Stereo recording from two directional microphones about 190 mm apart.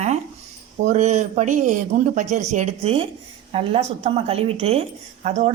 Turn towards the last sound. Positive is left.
turn(degrees=-35)  # may be behind; listen again after turning